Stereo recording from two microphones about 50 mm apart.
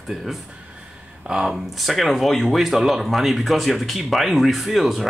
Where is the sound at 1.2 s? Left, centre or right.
Centre.